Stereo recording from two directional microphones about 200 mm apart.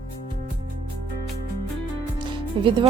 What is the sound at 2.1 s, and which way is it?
Music, 25° right (ahead or behind).